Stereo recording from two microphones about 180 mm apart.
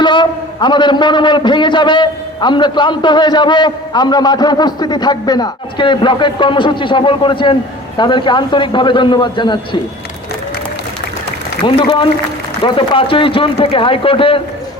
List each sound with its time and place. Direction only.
0.0 s a man's voice: 25° left (ahead or behind)
11.6 s a man's voice: 25° left (ahead or behind)